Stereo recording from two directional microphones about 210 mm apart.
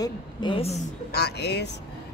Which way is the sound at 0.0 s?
20° left (ahead or behind).